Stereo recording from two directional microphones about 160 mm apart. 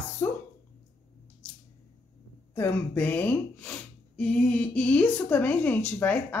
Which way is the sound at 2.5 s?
15° left (ahead or behind).